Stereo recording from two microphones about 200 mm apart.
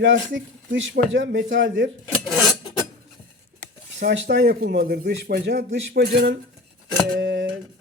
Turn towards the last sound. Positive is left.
turn(degrees=-70)  # may be behind; listen again after turning